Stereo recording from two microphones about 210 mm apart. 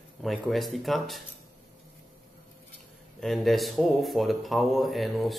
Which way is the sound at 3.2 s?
Centre (ahead or behind).